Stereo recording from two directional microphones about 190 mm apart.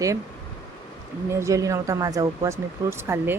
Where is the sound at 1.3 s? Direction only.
15° right (ahead or behind).